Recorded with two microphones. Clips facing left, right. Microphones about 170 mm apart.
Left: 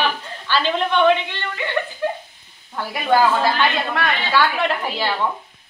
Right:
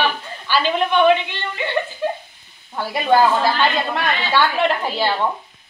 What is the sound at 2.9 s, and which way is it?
Speech, 20° right (ahead or behind).